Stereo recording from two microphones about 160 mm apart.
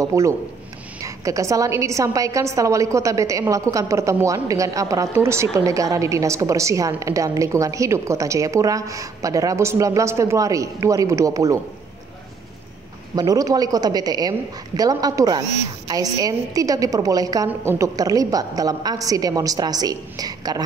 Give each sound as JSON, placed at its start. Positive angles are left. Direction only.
{"t": 0.0, "sound": "a woman's voice", "side_deg": -20}
{"t": 13.1, "sound": "a woman's voice", "side_deg": -25}